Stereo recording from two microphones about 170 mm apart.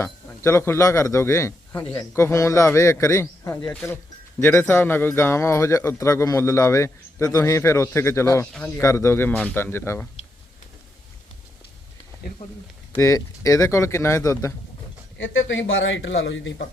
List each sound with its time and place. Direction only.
0.0 s speech: 15° left (ahead or behind)
13.0 s speech: 20° left (ahead or behind)
15.2 s a man's voice: 90° left